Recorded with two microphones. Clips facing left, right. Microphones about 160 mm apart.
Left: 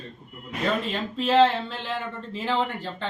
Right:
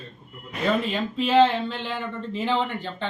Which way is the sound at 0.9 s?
Centre (ahead or behind).